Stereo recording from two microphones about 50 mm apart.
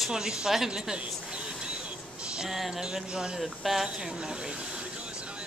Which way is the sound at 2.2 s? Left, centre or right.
Centre.